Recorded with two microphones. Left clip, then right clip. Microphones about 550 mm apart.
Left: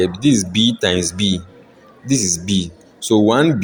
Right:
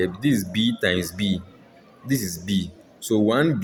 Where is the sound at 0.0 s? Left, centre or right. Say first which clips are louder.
Left 7 dB; right.